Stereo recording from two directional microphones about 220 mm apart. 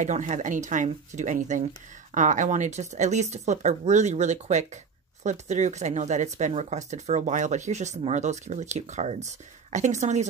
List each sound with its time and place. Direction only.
0.0 s speech: 35° right (ahead or behind)